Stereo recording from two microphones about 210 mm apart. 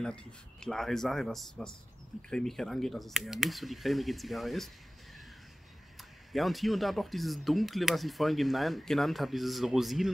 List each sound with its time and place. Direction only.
0.0 s speech: 5° left (ahead or behind)
5.9 s speech: centre (ahead or behind)